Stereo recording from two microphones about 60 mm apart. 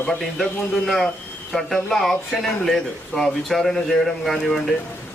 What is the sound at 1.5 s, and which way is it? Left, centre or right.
Speech, centre.